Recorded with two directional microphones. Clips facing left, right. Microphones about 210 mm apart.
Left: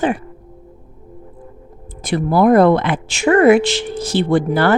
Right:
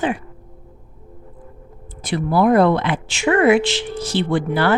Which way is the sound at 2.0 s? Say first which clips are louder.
Left 3 dB; 45° left (ahead or behind).